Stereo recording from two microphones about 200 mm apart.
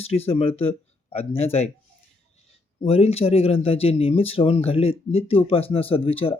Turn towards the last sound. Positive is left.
turn(degrees=25)  # may be behind; listen again after turning